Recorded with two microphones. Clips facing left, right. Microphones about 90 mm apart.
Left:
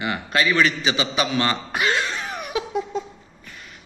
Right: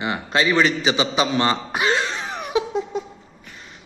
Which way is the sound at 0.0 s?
25° right (ahead or behind).